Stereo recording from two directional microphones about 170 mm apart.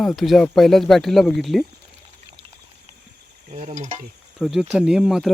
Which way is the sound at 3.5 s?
45° right (ahead or behind).